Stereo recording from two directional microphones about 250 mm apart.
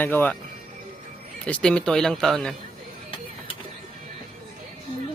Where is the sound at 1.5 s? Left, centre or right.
Centre.